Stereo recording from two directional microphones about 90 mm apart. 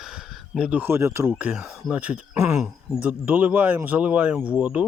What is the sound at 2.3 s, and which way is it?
Speech, 30° right (ahead or behind).